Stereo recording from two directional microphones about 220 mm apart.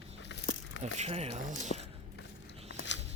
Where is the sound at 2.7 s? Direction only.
55° left (ahead or behind).